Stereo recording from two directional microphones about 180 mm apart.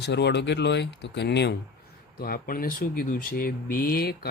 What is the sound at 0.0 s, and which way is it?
Speech, 70° left (ahead or behind).